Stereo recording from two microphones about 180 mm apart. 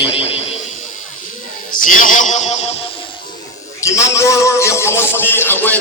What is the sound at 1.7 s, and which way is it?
Speech, 50° left (ahead or behind).